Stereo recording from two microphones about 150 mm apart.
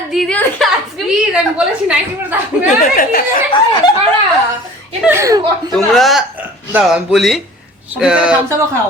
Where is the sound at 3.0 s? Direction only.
65° left (ahead or behind).